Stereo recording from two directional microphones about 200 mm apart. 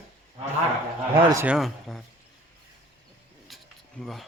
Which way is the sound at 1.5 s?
Centre (ahead or behind).